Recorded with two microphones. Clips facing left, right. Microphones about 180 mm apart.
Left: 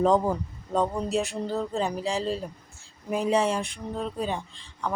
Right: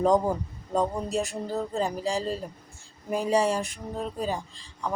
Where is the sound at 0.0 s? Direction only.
15° right (ahead or behind).